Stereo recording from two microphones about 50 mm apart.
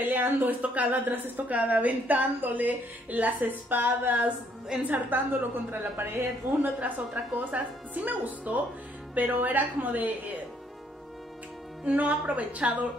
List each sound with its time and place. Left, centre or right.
0.0 s a woman's voice: right
4.7 s a woman's voice: centre
5.1 s a woman's voice: right
7.3 s a woman's voice: right
11.8 s a woman's voice: right